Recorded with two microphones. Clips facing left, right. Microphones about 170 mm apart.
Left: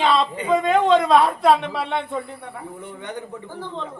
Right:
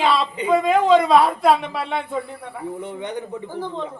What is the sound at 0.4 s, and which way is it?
A woman's voice, 5° right (ahead or behind).